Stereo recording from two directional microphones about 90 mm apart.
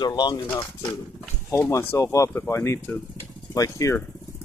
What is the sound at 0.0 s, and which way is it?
Speech, 50° left (ahead or behind).